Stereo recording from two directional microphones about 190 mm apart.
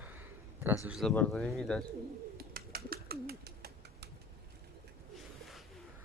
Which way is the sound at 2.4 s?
50° right (ahead or behind).